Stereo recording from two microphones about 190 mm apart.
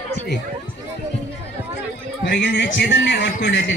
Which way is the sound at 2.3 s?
70° left (ahead or behind).